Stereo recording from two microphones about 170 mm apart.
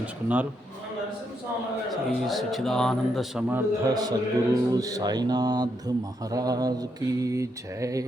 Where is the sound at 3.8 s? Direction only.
25° right (ahead or behind).